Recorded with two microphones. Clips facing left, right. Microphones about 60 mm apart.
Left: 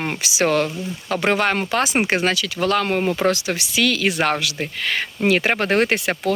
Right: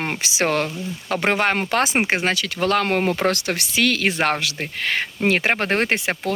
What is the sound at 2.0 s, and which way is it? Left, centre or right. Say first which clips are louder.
Speech: left 1 dB; right.